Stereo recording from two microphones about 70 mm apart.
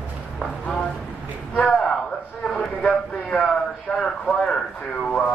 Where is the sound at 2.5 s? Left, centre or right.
Centre.